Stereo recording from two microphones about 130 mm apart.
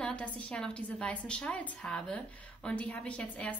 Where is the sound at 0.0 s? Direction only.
10° left (ahead or behind).